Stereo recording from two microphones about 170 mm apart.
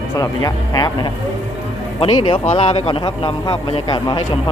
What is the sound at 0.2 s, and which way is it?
A man's voice, 20° left (ahead or behind).